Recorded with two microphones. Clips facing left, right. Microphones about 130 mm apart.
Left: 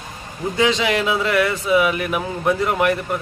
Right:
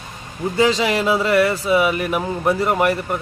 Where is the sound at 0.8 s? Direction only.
Centre (ahead or behind).